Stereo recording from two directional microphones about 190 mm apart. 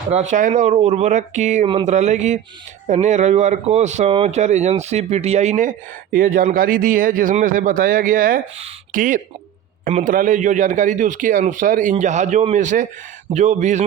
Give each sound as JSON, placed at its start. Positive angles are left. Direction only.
{"t": 0.1, "sound": "speech", "side_deg": -35}